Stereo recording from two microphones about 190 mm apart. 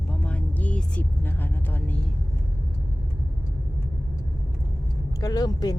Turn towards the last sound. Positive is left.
turn(degrees=20)  # may be behind; listen again after turning